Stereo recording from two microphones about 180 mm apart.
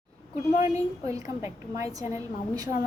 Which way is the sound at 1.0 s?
15° right (ahead or behind).